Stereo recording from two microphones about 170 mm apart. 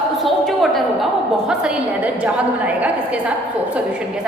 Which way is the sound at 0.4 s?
Centre (ahead or behind).